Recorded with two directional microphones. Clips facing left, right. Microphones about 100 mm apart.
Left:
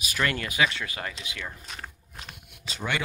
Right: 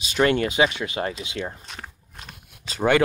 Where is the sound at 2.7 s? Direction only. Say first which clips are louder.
Right 11 dB; 50° right (ahead or behind).